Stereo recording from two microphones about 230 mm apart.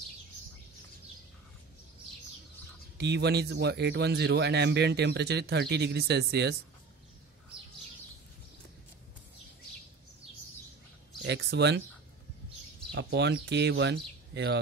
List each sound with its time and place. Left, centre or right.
3.0 s speech: right
11.2 s speech: right
12.9 s speech: right